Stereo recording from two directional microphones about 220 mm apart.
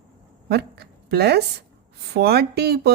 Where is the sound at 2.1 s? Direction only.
45° right (ahead or behind).